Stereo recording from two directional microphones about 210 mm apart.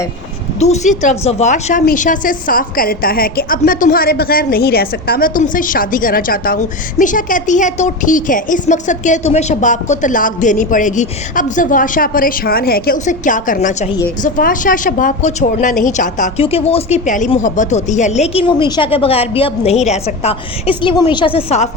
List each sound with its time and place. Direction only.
0.6 s a woman's voice: 35° left (ahead or behind)